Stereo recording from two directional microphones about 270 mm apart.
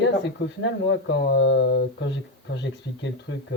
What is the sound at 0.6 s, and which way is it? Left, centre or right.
Speech, left.